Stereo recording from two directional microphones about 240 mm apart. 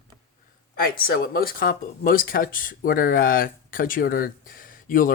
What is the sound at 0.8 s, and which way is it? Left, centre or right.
Speech, left.